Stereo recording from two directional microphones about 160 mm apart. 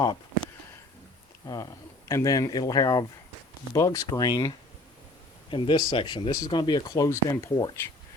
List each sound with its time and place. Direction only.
2.0 s speech: 20° left (ahead or behind)